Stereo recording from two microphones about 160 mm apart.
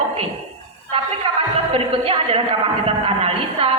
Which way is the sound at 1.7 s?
35° right (ahead or behind).